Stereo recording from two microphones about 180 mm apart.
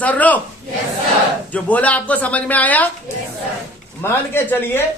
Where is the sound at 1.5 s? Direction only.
10° left (ahead or behind).